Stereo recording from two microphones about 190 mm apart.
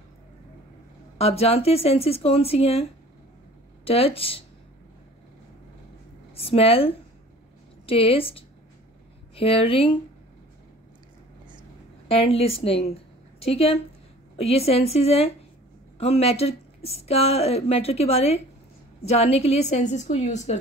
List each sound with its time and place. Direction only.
1.1 s speech: 30° left (ahead or behind)
6.3 s speech: 30° left (ahead or behind)
12.1 s a woman's voice: 30° left (ahead or behind)